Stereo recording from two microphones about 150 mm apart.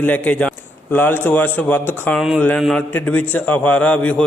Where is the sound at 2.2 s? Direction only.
5° right (ahead or behind).